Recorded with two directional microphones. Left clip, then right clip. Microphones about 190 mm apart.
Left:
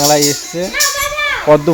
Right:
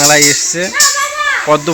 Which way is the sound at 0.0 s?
10° left (ahead or behind).